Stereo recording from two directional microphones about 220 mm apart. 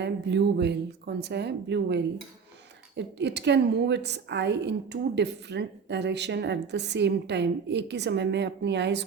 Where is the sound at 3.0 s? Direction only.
50° right (ahead or behind).